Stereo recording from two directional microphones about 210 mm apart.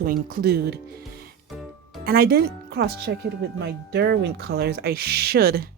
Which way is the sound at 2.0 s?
45° right (ahead or behind).